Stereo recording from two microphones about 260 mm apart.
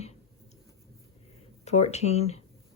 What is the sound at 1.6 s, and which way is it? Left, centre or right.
Speech, left.